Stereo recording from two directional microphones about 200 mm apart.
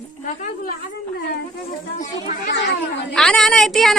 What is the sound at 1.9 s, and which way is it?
Speech, 40° left (ahead or behind).